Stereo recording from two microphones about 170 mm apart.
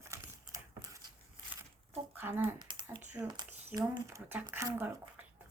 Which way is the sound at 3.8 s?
15° right (ahead or behind).